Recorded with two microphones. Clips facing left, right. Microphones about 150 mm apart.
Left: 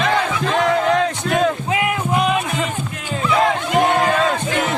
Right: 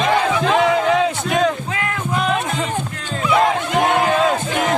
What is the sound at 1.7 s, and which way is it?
Music, 15° left (ahead or behind).